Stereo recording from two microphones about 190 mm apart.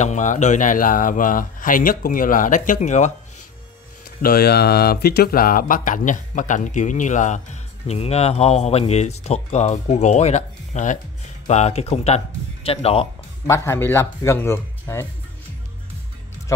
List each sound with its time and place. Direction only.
0.0 s speech: 40° left (ahead or behind)
4.2 s speech: 50° left (ahead or behind); by 13.1 s 30° left (ahead or behind)
13.5 s speech: 10° left (ahead or behind)